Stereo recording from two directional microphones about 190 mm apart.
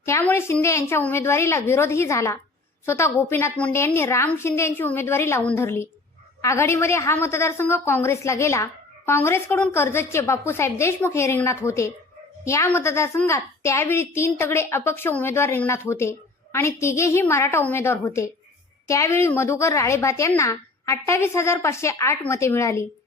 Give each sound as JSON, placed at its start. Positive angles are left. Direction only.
{"t": 0.0, "sound": "a woman's voice", "side_deg": 10}